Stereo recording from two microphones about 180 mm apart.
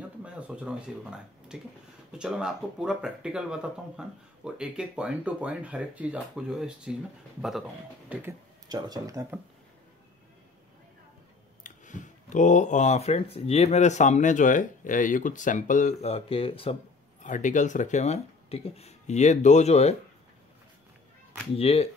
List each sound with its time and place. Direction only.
0.2 s speech: 5° right (ahead or behind)
8.6 s speech: 20° right (ahead or behind)
11.6 s speech: 45° left (ahead or behind)
17.2 s speech: 45° left (ahead or behind)
21.5 s speech: 35° left (ahead or behind)